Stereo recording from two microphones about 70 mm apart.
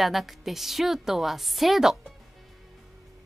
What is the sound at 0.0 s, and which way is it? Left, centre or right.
Speech, centre.